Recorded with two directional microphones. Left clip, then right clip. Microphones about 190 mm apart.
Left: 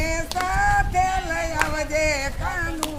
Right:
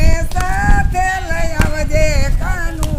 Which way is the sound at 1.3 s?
15° right (ahead or behind).